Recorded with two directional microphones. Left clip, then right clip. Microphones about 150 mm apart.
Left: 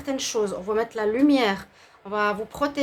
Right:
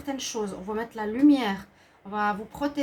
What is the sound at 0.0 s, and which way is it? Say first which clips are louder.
Speech: left 6 dB; 30° left (ahead or behind).